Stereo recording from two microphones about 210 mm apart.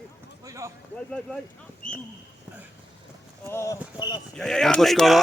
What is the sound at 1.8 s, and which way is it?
Speech, 40° left (ahead or behind).